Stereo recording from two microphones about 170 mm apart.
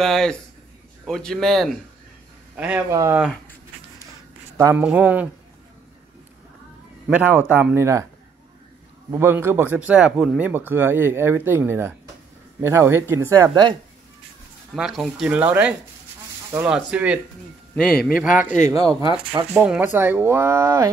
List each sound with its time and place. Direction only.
0.0 s a man's voice: centre (ahead or behind)
2.5 s speech: 10° right (ahead or behind)
4.6 s a man's voice: 15° right (ahead or behind)
7.1 s speech: 10° right (ahead or behind)
9.1 s speech: 15° right (ahead or behind)
14.8 s speech: centre (ahead or behind)
18.7 s speech: 20° right (ahead or behind)
19.5 s speech: 5° right (ahead or behind)